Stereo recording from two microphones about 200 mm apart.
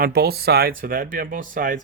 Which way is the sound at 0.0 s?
50° right (ahead or behind).